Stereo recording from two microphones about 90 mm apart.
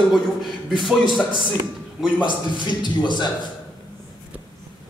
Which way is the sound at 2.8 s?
55° left (ahead or behind).